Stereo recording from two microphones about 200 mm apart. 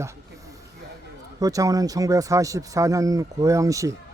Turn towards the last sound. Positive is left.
turn(degrees=-15)  # may be behind; listen again after turning